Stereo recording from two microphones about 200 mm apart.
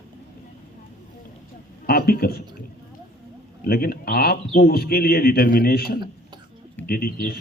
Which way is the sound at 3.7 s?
50° left (ahead or behind).